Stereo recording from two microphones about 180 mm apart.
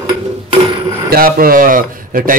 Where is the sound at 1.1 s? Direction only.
55° right (ahead or behind).